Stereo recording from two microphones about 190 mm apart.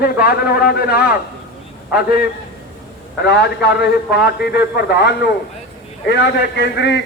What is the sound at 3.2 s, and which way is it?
A man's voice, 60° left (ahead or behind).